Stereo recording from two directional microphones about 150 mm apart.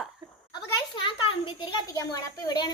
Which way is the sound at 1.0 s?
35° left (ahead or behind).